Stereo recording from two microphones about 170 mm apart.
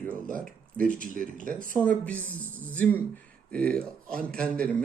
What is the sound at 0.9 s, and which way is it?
Speech, 50° right (ahead or behind).